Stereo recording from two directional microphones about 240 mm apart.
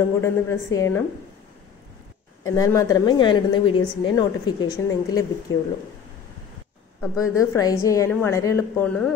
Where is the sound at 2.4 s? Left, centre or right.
Centre.